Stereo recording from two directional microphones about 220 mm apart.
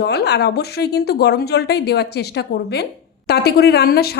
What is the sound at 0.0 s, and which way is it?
A woman's voice, 45° left (ahead or behind).